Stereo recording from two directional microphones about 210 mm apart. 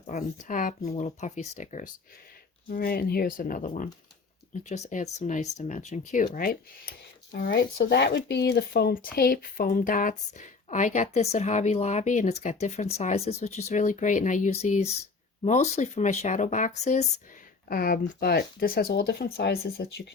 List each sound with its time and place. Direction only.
0.1 s speech: 40° left (ahead or behind)